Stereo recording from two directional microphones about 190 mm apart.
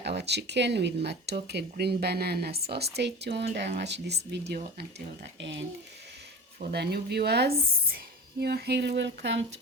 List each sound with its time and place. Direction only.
0.0 s speech: 65° right (ahead or behind)
6.6 s speech: 55° right (ahead or behind)